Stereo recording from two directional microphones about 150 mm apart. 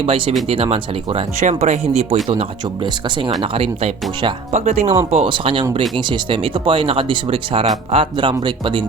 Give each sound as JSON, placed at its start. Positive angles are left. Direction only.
{"t": 0.0, "sound": "speech", "side_deg": -40}
{"t": 3.5, "sound": "speech", "side_deg": -35}